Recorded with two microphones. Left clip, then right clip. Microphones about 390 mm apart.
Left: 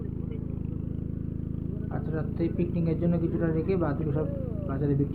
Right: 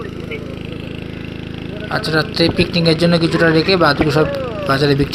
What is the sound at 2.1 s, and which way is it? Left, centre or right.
Speech, right.